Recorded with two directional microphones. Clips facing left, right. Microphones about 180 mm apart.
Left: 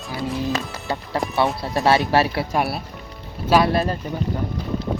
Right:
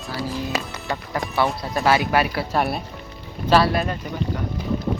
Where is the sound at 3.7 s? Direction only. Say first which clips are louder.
Left 2 dB; 35° left (ahead or behind).